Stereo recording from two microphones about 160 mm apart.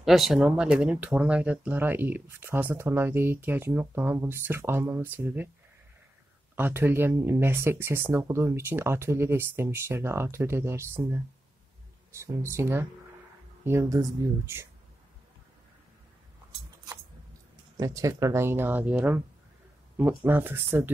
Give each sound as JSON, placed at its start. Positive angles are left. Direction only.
{"t": 0.0, "sound": "speech", "side_deg": 0}
{"t": 6.5, "sound": "speech", "side_deg": -15}
{"t": 12.2, "sound": "speech", "side_deg": -15}
{"t": 17.7, "sound": "speech", "side_deg": -20}
{"t": 20.2, "sound": "speech", "side_deg": -10}